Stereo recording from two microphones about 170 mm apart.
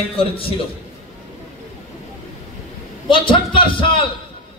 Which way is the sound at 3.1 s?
30° left (ahead or behind).